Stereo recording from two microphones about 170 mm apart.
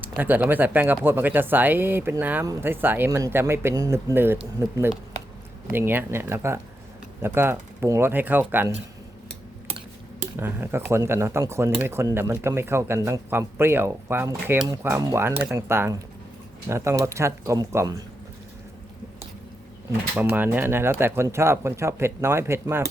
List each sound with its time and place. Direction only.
0.2 s speech: 10° right (ahead or behind)
10.3 s speech: 15° right (ahead or behind)
20.1 s speech: 10° right (ahead or behind)